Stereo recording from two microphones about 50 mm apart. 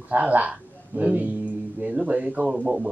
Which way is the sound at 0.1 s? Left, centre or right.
Right.